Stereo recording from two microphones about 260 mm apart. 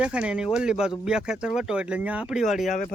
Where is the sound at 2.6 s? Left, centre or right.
Left.